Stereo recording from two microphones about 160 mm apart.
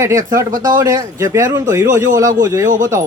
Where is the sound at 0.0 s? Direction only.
20° right (ahead or behind).